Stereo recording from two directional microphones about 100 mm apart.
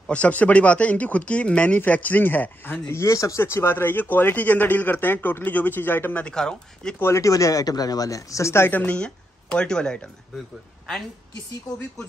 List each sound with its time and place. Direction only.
0.1 s speech: 15° left (ahead or behind)
7.0 s speech: 30° left (ahead or behind); by 10.0 s 5° left (ahead or behind)